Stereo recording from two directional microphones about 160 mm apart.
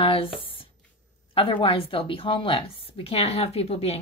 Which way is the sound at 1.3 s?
35° left (ahead or behind).